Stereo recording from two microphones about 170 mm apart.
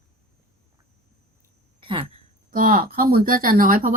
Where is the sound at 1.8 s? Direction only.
30° right (ahead or behind).